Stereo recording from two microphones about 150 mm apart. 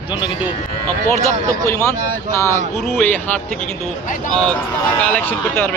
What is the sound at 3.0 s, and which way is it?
Speech, 10° left (ahead or behind).